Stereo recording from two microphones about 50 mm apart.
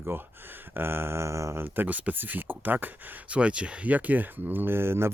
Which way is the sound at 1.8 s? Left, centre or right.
Right.